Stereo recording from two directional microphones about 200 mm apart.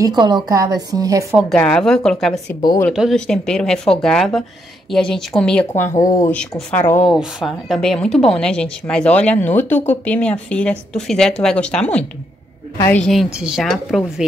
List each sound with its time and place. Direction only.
0.0 s speech: 20° right (ahead or behind)
1.3 s a woman's voice: 5° left (ahead or behind)
5.7 s a woman's voice: 15° left (ahead or behind); by 14.2 s centre (ahead or behind)